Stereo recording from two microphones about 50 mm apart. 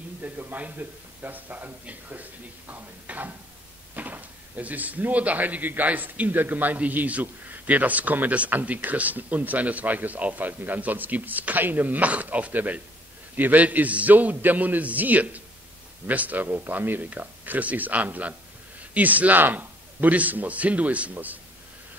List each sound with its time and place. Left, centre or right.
0.2 s speech: right